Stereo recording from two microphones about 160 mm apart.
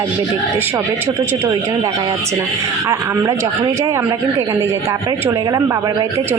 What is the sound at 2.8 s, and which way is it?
A woman's voice, 20° right (ahead or behind).